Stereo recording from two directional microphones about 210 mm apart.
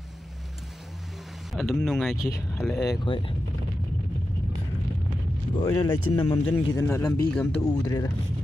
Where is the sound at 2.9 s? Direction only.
25° left (ahead or behind).